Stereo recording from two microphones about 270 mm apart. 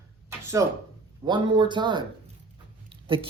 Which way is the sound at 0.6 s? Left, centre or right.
Centre.